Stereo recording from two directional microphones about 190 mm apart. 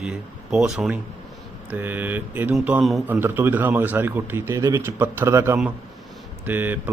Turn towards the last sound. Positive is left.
turn(degrees=-10)  # may be behind; listen again after turning